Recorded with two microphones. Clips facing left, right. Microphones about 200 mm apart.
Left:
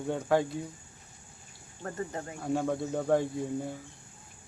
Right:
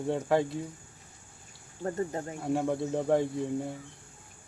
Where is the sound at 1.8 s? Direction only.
30° right (ahead or behind).